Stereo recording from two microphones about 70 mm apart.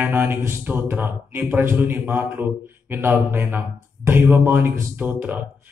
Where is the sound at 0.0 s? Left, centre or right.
Right.